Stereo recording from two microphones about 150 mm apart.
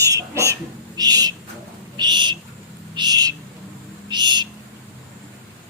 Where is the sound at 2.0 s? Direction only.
30° right (ahead or behind).